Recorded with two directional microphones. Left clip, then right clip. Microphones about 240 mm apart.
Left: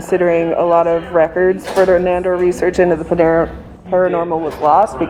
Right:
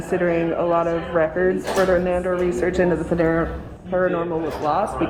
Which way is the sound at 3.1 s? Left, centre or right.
Left.